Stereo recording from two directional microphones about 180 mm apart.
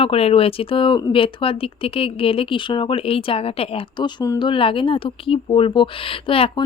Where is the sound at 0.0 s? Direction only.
35° left (ahead or behind).